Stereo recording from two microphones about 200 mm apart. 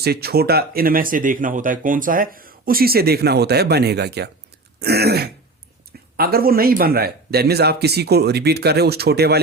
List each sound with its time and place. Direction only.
0.0 s speech: 50° right (ahead or behind)